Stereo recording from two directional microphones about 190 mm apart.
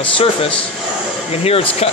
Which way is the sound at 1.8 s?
35° left (ahead or behind).